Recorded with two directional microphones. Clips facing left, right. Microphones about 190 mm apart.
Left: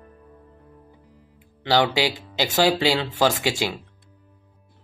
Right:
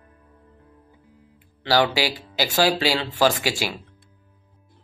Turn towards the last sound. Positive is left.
turn(degrees=25)  # may be behind; listen again after turning